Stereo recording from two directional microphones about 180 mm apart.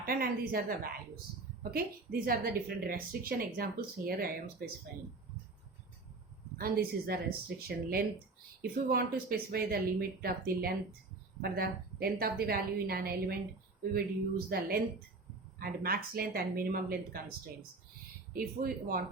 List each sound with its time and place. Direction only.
0.0 s a woman's voice: 55° right (ahead or behind)
6.6 s a woman's voice: 55° right (ahead or behind)
18.3 s a woman's voice: 55° right (ahead or behind)